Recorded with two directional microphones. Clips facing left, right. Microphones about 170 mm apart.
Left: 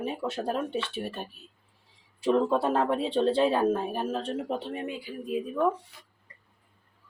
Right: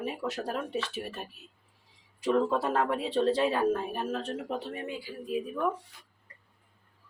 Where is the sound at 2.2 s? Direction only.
30° left (ahead or behind).